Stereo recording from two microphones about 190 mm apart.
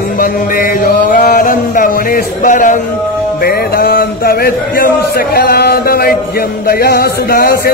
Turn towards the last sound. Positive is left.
turn(degrees=50)  # may be behind; listen again after turning